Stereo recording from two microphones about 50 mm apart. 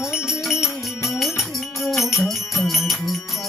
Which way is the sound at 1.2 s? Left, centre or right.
Centre.